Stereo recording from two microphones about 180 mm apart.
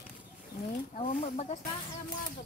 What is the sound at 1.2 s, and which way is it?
Speech, 35° left (ahead or behind).